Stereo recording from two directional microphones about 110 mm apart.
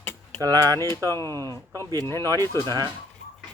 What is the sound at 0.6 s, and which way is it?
Speech, 25° left (ahead or behind).